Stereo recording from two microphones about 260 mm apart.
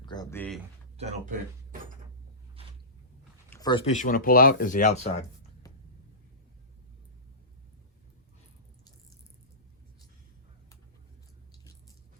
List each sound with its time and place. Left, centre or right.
0.0 s speech: centre
0.9 s speech: right
3.5 s speech: centre
11.5 s a sound: centre